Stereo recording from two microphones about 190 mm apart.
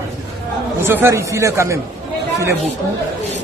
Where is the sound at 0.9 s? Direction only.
15° right (ahead or behind).